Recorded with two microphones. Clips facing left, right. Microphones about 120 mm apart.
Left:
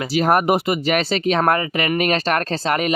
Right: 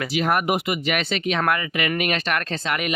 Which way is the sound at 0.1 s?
40° left (ahead or behind).